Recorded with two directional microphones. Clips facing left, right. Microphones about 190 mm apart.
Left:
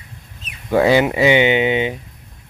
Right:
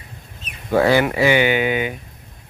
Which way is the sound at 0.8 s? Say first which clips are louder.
Left 2 dB; 20° left (ahead or behind).